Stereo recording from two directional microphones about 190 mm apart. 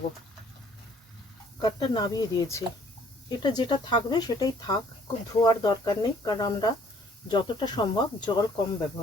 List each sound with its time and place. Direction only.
1.6 s speech: 20° left (ahead or behind)